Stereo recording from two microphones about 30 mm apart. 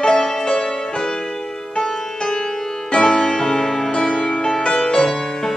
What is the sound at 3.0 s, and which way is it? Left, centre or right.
Music, left.